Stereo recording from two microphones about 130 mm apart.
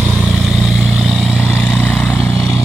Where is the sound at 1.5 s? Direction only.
10° left (ahead or behind).